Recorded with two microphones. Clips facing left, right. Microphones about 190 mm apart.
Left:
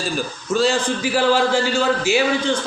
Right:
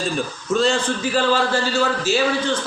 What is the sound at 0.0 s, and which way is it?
A man's voice, centre (ahead or behind).